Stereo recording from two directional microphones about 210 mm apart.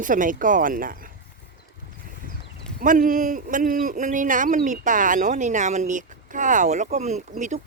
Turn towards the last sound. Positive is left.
turn(degrees=-35)  # may be behind; listen again after turning